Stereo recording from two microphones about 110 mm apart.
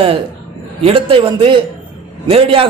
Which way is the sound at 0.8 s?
55° right (ahead or behind).